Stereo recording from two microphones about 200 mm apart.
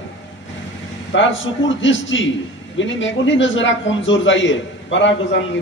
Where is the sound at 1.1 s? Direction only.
70° left (ahead or behind).